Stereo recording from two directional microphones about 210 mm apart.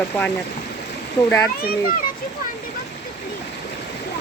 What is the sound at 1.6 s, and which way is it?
Speech, 45° left (ahead or behind).